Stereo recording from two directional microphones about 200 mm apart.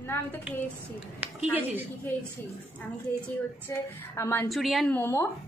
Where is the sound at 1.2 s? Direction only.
10° right (ahead or behind).